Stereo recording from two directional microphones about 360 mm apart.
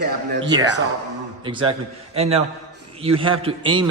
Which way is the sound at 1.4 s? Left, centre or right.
Centre.